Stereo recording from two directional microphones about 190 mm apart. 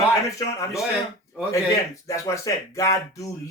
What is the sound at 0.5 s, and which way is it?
Speech, 15° left (ahead or behind).